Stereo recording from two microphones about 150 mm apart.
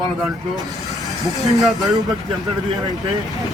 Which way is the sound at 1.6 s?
Centre (ahead or behind).